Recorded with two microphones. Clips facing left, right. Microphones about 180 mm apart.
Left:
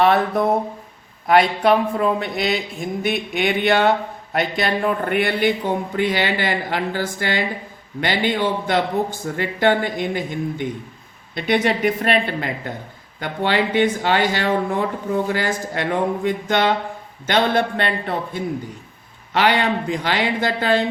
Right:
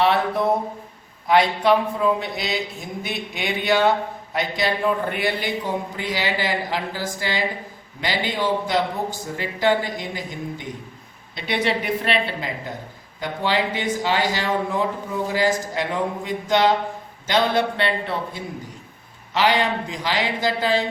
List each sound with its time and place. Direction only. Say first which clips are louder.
1.3 s speech: left 2 dB; 55° left (ahead or behind)